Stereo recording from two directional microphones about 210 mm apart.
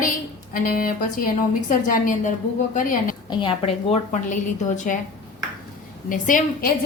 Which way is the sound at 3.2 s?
25° left (ahead or behind).